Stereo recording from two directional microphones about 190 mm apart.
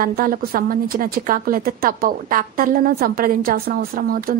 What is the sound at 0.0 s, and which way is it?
A woman's voice, 50° right (ahead or behind).